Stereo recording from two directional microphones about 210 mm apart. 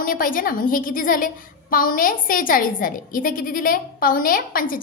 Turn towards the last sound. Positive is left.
turn(degrees=40)  # may be behind; listen again after turning